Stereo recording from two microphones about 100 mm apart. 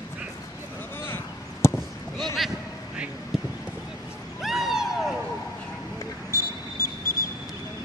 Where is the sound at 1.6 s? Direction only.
30° left (ahead or behind).